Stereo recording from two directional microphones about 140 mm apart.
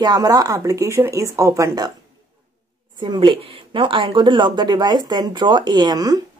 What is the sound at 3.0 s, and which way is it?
A woman's voice, 35° right (ahead or behind).